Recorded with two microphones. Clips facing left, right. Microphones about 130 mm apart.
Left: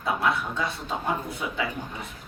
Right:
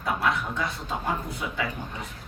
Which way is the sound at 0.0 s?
25° left (ahead or behind).